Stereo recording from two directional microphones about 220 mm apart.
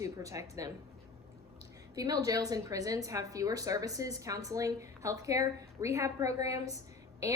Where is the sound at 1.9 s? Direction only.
15° right (ahead or behind).